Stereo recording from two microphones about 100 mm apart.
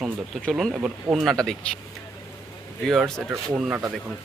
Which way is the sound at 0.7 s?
15° right (ahead or behind).